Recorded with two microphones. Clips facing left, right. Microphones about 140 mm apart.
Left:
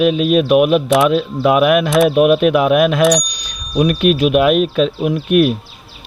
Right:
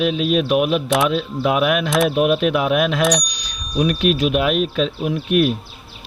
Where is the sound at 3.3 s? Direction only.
50° left (ahead or behind).